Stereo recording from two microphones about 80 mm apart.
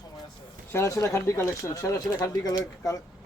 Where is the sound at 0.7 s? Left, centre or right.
Left.